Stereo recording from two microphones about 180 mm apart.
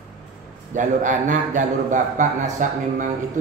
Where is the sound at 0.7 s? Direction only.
45° right (ahead or behind).